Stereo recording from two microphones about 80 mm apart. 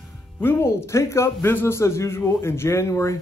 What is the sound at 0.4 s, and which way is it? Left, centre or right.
A man's voice, left.